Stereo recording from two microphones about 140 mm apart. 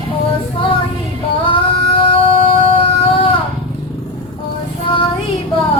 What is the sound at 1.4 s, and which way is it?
Music, 40° left (ahead or behind).